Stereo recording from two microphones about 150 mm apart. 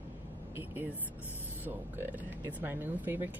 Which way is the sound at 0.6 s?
15° right (ahead or behind).